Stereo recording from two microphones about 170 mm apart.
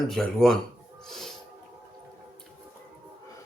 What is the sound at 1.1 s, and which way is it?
Music, centre (ahead or behind).